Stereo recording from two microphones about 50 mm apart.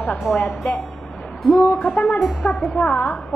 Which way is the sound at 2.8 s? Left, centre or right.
Left.